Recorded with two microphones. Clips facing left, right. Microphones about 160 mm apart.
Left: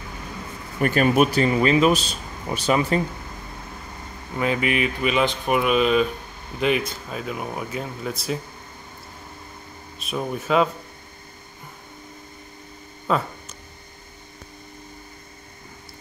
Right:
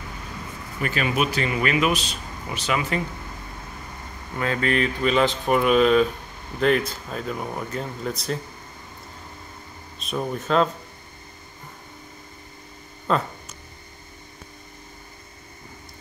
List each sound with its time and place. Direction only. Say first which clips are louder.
0.7 s speech: left 6 dB; 45° left (ahead or behind)
4.4 s speech: left 1 dB; 15° left (ahead or behind)
9.9 s speech: even; 5° left (ahead or behind)
13.1 s speech: even; 5° left (ahead or behind)